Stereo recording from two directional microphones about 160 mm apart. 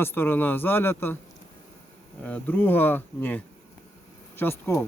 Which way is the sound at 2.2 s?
10° left (ahead or behind).